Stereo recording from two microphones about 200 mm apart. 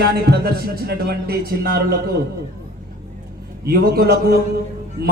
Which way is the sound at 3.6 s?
50° right (ahead or behind).